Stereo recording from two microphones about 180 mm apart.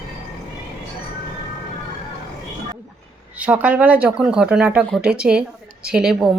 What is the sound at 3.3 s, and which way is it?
Speech, 10° right (ahead or behind).